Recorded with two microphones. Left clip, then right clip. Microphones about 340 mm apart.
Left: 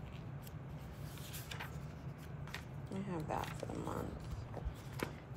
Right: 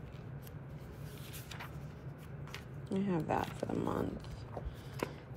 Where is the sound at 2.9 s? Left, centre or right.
Right.